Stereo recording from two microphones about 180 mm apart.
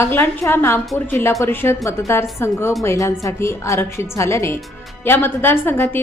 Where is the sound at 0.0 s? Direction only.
15° left (ahead or behind).